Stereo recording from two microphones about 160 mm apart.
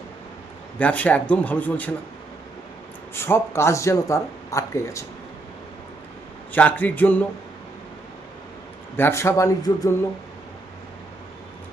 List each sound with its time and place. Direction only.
0.8 s speech: 10° left (ahead or behind)
3.2 s speech: 15° left (ahead or behind)
6.5 s speech: 10° left (ahead or behind)
9.0 s speech: 15° left (ahead or behind)